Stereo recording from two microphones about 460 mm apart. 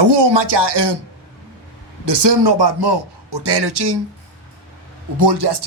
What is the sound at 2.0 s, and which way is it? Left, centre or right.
Speech, right.